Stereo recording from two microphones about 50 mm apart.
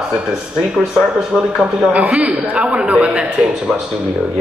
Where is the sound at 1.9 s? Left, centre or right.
Right.